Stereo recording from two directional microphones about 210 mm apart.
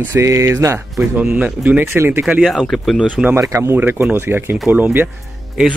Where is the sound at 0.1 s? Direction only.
15° right (ahead or behind).